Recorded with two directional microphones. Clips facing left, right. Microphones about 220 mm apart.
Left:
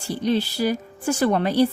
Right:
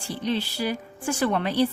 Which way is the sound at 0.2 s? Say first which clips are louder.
Left 5 dB; 40° left (ahead or behind).